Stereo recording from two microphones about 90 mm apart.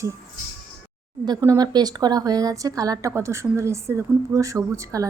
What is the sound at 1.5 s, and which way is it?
Speech, 50° right (ahead or behind).